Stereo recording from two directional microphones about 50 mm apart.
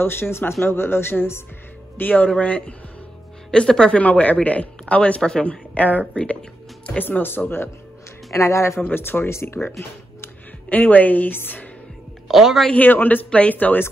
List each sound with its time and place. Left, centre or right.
0.0 s speech: left
2.0 s speech: left
3.5 s speech: centre
4.0 s speech: left
7.0 s speech: left
8.3 s a man's voice: left
8.8 s speech: left
10.7 s a woman's voice: left
12.3 s a man's voice: centre
12.7 s a woman's voice: left